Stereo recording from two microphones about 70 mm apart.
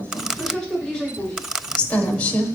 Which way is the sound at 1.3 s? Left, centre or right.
Centre.